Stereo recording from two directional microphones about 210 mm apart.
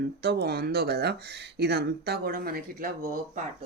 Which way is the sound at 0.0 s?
50° right (ahead or behind).